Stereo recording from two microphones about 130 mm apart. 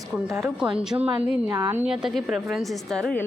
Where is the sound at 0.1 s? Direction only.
5° right (ahead or behind).